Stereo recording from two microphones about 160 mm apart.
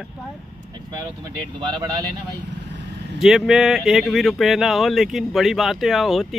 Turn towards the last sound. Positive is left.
turn(degrees=0)  # may be behind; listen again after turning